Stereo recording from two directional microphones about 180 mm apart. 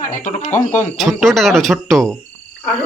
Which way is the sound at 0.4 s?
10° left (ahead or behind).